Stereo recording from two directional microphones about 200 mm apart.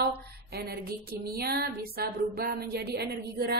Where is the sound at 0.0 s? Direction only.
50° right (ahead or behind).